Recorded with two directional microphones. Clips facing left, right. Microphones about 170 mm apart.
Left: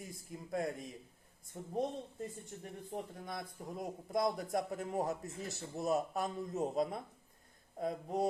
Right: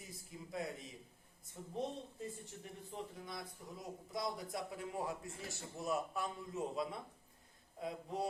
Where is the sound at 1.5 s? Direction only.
50° left (ahead or behind).